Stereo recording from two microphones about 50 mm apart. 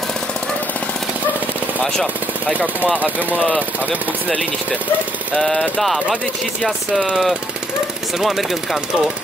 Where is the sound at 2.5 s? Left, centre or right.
Right.